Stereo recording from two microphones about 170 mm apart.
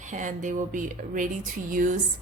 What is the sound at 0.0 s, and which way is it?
Speech, 45° right (ahead or behind).